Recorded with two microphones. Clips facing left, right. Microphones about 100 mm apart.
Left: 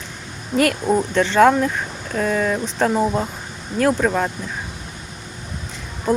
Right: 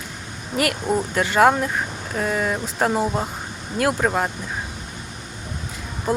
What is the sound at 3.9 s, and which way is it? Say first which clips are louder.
Speech: left 2 dB; 15° right (ahead or behind).